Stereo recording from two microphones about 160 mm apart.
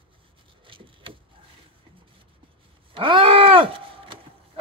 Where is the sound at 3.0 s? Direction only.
35° right (ahead or behind).